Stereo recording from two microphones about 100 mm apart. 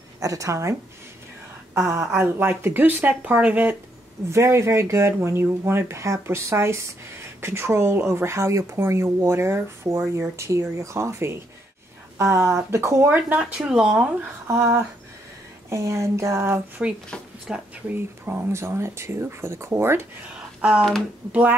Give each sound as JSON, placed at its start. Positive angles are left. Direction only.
{"t": 0.2, "sound": "speech", "side_deg": -35}
{"t": 4.3, "sound": "speech", "side_deg": -30}
{"t": 13.6, "sound": "speech", "side_deg": -5}
{"t": 14.5, "sound": "speech", "side_deg": -25}
{"t": 17.5, "sound": "speech", "side_deg": -5}
{"t": 17.8, "sound": "speech", "side_deg": -20}
{"t": 20.6, "sound": "speech", "side_deg": -5}